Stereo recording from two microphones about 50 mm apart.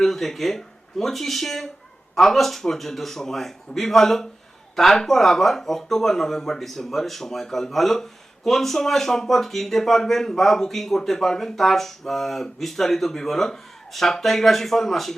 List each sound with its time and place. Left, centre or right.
0.0 s speech: centre